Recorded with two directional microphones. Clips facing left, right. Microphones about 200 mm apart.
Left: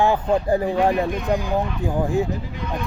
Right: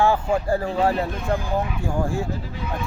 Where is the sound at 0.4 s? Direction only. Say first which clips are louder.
Left 2 dB; 20° left (ahead or behind).